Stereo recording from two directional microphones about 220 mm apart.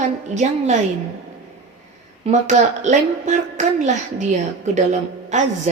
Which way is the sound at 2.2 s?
30° right (ahead or behind).